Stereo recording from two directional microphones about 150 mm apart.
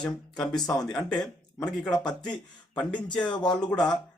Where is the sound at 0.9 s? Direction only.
5° left (ahead or behind).